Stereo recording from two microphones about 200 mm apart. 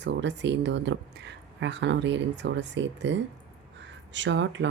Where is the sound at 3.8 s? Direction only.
65° right (ahead or behind).